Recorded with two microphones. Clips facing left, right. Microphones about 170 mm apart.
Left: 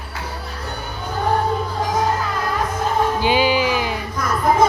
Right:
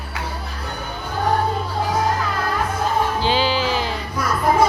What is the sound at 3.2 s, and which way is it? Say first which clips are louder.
Music: left 2 dB; 15° left (ahead or behind).